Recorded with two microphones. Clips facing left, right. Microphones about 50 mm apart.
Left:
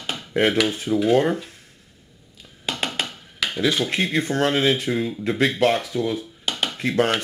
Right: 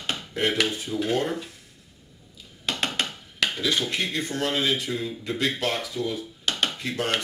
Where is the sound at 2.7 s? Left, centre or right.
Centre.